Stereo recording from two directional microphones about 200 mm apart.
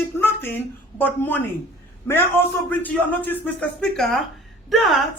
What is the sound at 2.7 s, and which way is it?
A woman's voice, 10° left (ahead or behind).